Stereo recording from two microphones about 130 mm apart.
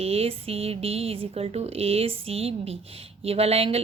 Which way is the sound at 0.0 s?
50° right (ahead or behind).